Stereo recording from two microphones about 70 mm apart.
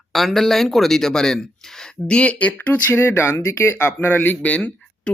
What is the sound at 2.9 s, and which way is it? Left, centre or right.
Speech, left.